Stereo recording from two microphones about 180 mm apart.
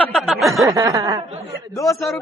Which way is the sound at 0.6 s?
20° right (ahead or behind).